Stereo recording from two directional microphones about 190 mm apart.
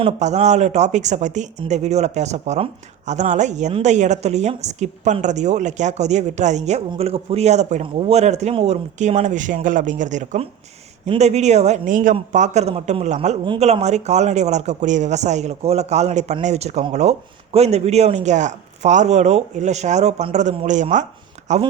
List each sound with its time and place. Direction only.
0.0 s speech: 35° right (ahead or behind)